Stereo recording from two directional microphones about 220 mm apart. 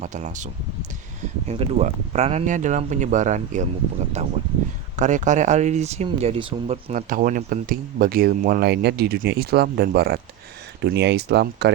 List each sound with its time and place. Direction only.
0.0 s speech: 35° right (ahead or behind); by 11.7 s 50° right (ahead or behind)